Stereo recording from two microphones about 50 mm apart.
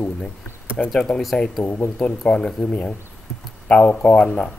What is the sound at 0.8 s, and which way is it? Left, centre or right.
Speech, centre.